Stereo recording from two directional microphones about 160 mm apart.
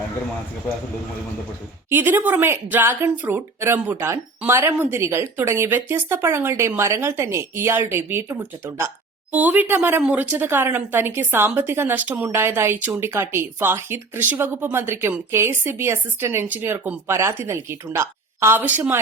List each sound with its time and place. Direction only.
1.9 s a woman's voice: 15° right (ahead or behind)